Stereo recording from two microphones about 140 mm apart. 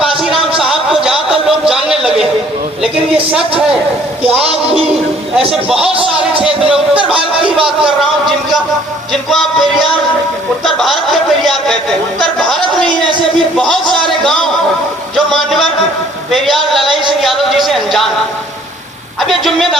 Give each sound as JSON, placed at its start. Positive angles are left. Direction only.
{"t": 0.0, "sound": "music", "side_deg": -5}
{"t": 5.5, "sound": "speech", "side_deg": -5}
{"t": 5.9, "sound": "speech", "side_deg": -40}
{"t": 6.4, "sound": "speech", "side_deg": -5}
{"t": 9.3, "sound": "speech", "side_deg": 0}
{"t": 10.8, "sound": "a sound", "side_deg": 0}
{"t": 13.6, "sound": "speech", "side_deg": 5}
{"t": 15.1, "sound": "a sound", "side_deg": 0}
{"t": 17.1, "sound": "music", "side_deg": 0}
{"t": 19.3, "sound": "speech", "side_deg": 0}